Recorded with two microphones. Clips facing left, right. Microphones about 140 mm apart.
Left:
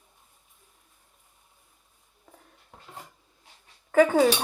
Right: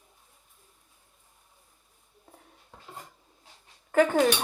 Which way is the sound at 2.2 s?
5° right (ahead or behind).